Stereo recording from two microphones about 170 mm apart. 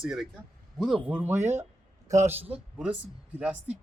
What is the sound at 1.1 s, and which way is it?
Speech, 15° right (ahead or behind).